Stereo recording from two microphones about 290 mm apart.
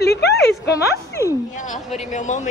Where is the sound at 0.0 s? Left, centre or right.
Left.